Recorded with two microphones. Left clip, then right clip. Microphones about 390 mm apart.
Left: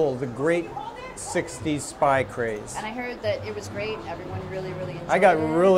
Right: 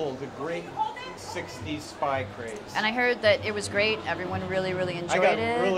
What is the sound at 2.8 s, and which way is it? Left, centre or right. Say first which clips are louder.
A woman's voice: right 7 dB; right.